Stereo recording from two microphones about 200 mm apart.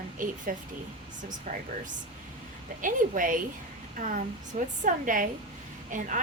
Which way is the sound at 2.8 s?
40° right (ahead or behind).